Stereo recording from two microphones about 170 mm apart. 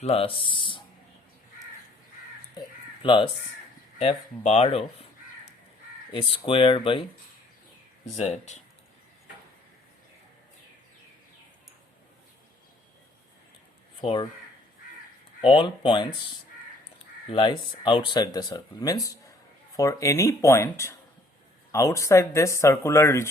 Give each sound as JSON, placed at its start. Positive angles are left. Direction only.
{"t": 0.0, "sound": "speech", "side_deg": 35}
{"t": 2.6, "sound": "crow", "side_deg": 30}
{"t": 4.4, "sound": "speech", "side_deg": 35}
{"t": 6.1, "sound": "speech", "side_deg": 35}
{"t": 8.1, "sound": "speech", "side_deg": 40}
{"t": 14.0, "sound": "speech", "side_deg": 30}
{"t": 15.4, "sound": "speech", "side_deg": 30}
{"t": 17.2, "sound": "speech", "side_deg": 30}